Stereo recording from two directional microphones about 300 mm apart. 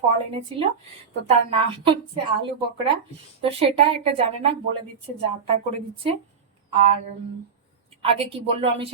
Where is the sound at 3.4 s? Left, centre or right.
Centre.